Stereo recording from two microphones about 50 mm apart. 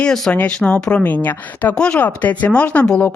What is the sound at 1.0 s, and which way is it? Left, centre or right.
Speech, left.